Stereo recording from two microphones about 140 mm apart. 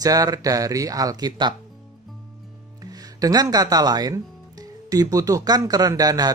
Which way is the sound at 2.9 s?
25° right (ahead or behind).